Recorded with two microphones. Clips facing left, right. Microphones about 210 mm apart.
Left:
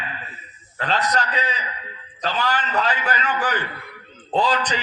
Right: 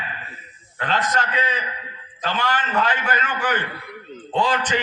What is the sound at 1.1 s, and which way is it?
A man's voice, 40° left (ahead or behind).